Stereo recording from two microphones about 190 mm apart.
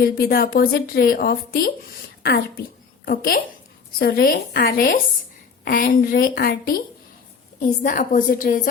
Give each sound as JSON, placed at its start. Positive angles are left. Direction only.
{"t": 0.0, "sound": "a woman's voice", "side_deg": 50}
{"t": 3.1, "sound": "a woman's voice", "side_deg": 50}